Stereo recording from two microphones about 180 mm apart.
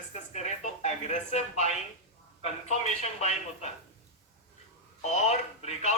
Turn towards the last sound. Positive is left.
turn(degrees=40)  # may be behind; listen again after turning